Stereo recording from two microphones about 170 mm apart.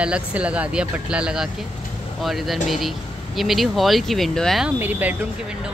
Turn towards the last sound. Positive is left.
turn(degrees=-10)  # may be behind; listen again after turning